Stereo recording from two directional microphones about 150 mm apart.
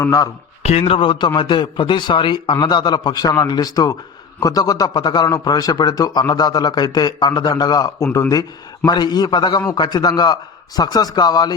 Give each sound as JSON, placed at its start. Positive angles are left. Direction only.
{"t": 0.0, "sound": "a man's voice", "side_deg": 20}
{"t": 0.6, "sound": "a man's voice", "side_deg": 40}